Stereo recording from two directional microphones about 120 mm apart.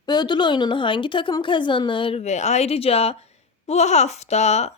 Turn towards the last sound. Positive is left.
turn(degrees=65)  # may be behind; listen again after turning